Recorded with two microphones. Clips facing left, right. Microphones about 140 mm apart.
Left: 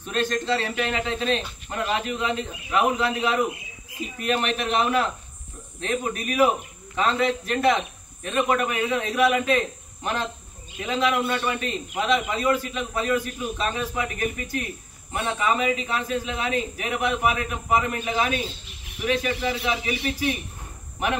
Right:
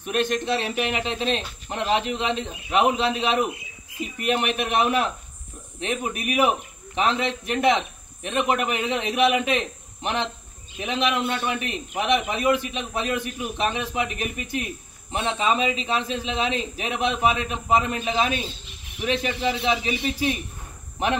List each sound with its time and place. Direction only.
0.0 s a man's voice: 15° right (ahead or behind)
10.8 s speech: 20° right (ahead or behind)